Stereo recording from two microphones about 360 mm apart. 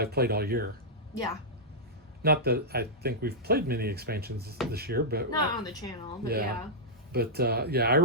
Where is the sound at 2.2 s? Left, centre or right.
Right.